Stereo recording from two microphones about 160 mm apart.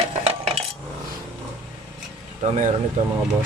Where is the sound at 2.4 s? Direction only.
50° right (ahead or behind).